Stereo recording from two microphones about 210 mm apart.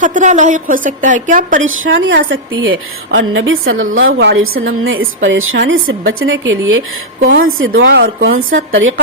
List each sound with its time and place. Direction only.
0.0 s a woman's voice: 35° right (ahead or behind)
1.6 s a woman's voice: 65° right (ahead or behind)
4.4 s a woman's voice: 75° right (ahead or behind)
7.2 s a woman's voice: 45° right (ahead or behind)
7.8 s a woman's voice: 60° right (ahead or behind)